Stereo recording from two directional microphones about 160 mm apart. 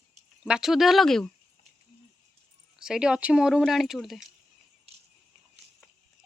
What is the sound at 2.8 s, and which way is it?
Speech, 5° right (ahead or behind).